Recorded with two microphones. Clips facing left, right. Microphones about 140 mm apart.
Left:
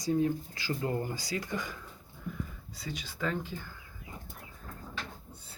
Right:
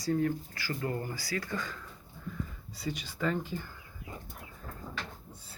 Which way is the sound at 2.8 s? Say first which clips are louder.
Right 2 dB; 10° right (ahead or behind).